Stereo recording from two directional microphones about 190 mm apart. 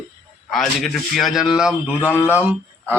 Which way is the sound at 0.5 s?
Centre (ahead or behind).